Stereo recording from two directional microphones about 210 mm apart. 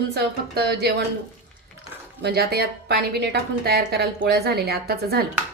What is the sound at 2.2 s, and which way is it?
A woman's voice, 50° right (ahead or behind).